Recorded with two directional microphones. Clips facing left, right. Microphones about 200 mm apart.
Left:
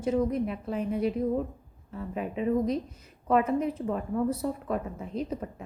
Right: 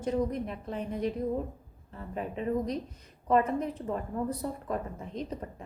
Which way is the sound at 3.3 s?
5° left (ahead or behind).